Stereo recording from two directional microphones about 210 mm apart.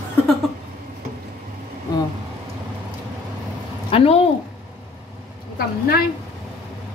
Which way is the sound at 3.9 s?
30° left (ahead or behind).